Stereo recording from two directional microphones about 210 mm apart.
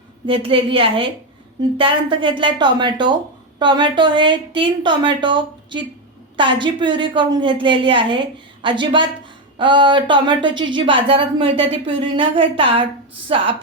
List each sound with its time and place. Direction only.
0.3 s a woman's voice: 25° right (ahead or behind)